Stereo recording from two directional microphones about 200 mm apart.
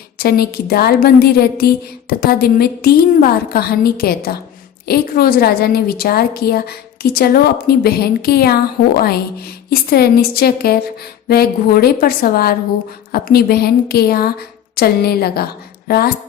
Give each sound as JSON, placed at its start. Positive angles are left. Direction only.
{"t": 0.2, "sound": "a woman's voice", "side_deg": 50}
{"t": 9.6, "sound": "a woman's voice", "side_deg": 50}